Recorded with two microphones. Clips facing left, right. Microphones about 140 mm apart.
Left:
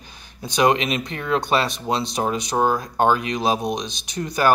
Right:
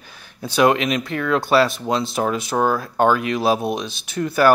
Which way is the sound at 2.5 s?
15° left (ahead or behind).